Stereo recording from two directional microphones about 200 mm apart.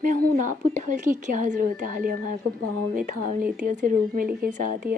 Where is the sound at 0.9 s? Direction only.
40° right (ahead or behind).